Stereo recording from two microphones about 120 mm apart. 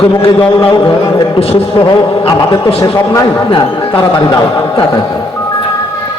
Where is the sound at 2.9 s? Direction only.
25° left (ahead or behind).